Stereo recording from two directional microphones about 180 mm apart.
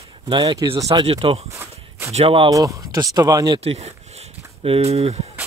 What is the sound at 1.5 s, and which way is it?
Walk, 15° right (ahead or behind).